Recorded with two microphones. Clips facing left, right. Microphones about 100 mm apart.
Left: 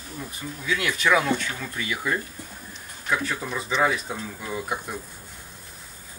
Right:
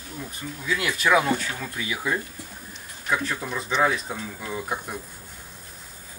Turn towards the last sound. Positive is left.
turn(degrees=0)  # may be behind; listen again after turning